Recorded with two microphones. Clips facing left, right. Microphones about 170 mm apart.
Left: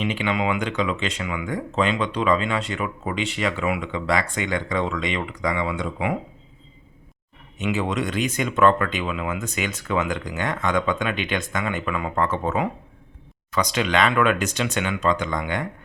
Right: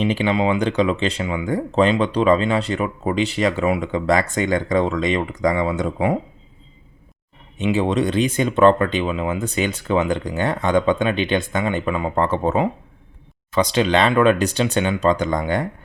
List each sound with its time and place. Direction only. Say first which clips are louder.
0.0 s speech: right 5 dB; 35° right (ahead or behind)
7.6 s speech: right 5 dB; 30° right (ahead or behind)